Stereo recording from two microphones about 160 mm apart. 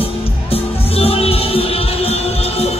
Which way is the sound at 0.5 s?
40° left (ahead or behind).